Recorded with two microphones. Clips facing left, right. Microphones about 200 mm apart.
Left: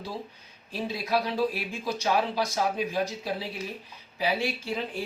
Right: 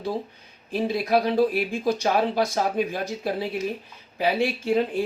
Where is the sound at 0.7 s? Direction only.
55° right (ahead or behind).